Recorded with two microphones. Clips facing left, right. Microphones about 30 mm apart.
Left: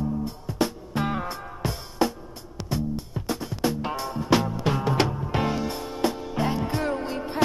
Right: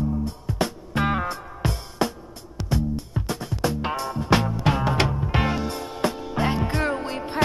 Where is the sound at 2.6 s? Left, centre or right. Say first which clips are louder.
Right 2 dB; centre.